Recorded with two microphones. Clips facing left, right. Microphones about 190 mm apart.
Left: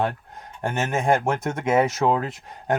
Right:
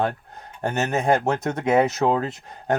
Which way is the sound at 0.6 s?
40° right (ahead or behind).